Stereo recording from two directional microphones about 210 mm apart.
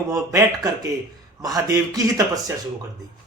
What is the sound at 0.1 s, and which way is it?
A man's voice, 15° right (ahead or behind).